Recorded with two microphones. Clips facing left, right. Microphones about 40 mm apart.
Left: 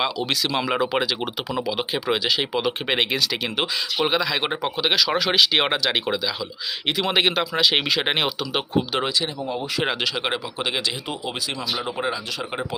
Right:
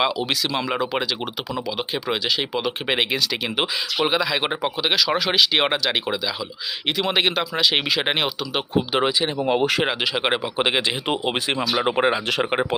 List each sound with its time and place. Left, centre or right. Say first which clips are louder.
0.0 s speech: right 2 dB; centre
8.9 s speech: right 4 dB; centre
9.5 s speech: right 8 dB; right
10.2 s speech: right 4 dB; right
11.1 s speech: right 6 dB; right